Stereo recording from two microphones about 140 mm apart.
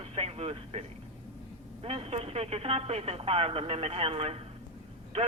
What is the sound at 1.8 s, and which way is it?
Speech, 45° right (ahead or behind).